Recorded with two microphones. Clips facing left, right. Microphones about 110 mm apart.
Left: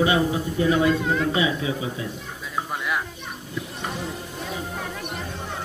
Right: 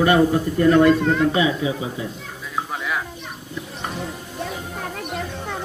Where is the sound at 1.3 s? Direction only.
30° right (ahead or behind).